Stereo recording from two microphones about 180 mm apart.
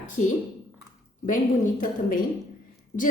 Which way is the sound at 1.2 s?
45° left (ahead or behind).